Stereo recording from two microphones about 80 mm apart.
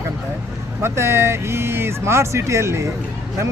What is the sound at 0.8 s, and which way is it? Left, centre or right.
Speech, right.